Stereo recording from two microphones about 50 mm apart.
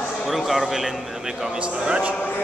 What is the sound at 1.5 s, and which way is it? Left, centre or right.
Speech, right.